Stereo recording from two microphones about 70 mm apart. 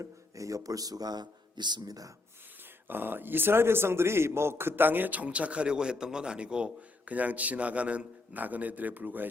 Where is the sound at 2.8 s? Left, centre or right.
Right.